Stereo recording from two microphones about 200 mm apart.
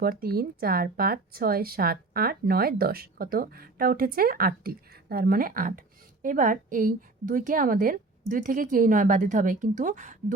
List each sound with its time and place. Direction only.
0.0 s speech: 50° right (ahead or behind)